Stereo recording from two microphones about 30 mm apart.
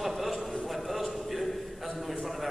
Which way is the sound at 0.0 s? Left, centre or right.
Centre.